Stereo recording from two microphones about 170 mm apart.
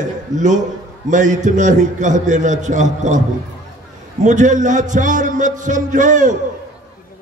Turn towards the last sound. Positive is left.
turn(degrees=-50)  # may be behind; listen again after turning